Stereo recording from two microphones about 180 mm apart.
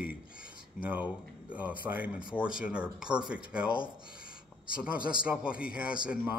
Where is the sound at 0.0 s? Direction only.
5° right (ahead or behind).